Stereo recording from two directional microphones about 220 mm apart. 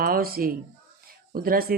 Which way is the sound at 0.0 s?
40° right (ahead or behind).